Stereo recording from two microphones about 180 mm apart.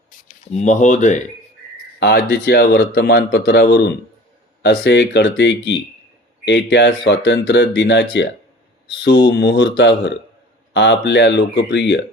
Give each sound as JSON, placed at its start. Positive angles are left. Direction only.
{"t": 0.5, "sound": "speech", "side_deg": 40}
{"t": 2.0, "sound": "a man's voice", "side_deg": 65}
{"t": 9.0, "sound": "speech", "side_deg": 70}